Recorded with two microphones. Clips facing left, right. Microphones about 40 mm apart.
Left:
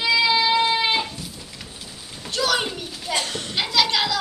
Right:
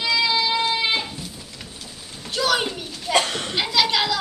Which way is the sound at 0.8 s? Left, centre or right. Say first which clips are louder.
Left 1 dB; centre.